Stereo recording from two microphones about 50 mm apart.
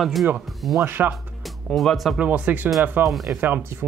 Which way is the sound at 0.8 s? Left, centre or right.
Right.